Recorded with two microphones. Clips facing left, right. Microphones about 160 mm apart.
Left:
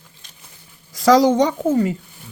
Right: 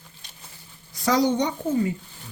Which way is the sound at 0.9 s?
90° left.